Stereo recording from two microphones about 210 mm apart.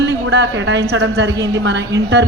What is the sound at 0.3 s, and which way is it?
A man's voice, 55° right (ahead or behind).